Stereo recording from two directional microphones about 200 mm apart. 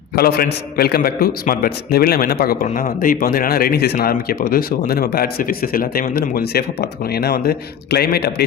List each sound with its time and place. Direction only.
0.2 s speech: 50° left (ahead or behind)